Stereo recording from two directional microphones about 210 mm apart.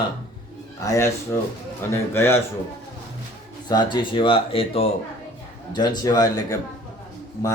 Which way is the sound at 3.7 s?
20° left (ahead or behind).